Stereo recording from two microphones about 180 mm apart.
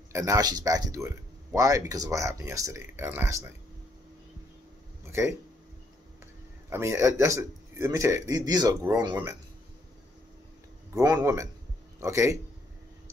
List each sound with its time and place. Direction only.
0.1 s speech: 15° right (ahead or behind)
6.7 s speech: 15° right (ahead or behind)
11.0 s speech: 20° right (ahead or behind)